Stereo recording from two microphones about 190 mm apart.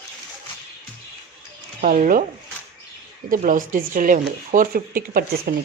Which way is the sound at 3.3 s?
45° right (ahead or behind).